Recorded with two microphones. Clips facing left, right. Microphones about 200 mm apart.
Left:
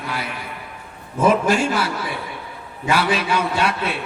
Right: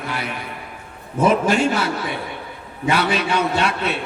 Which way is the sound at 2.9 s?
25° right (ahead or behind).